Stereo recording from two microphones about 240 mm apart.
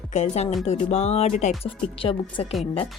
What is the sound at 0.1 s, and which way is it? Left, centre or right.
Speech, left.